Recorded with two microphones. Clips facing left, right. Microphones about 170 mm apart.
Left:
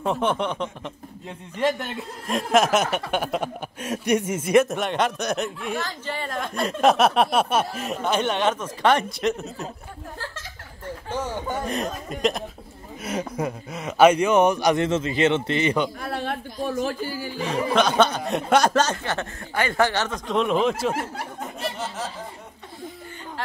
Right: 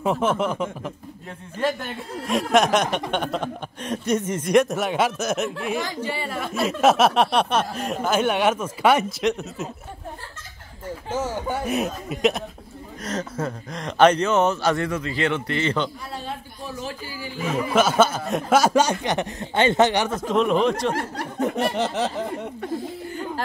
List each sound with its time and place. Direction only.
0.0 s speech: 5° right (ahead or behind)
2.2 s speech: centre (ahead or behind)
5.8 s speech: 10° right (ahead or behind)
11.1 s speech: 10° right (ahead or behind)
13.0 s speech: 10° left (ahead or behind)
16.1 s speech: 65° left (ahead or behind); by 17.3 s 45° left (ahead or behind)
17.4 s speech: 5° right (ahead or behind)
20.2 s speech: centre (ahead or behind)
21.4 s a sound: 65° right (ahead or behind)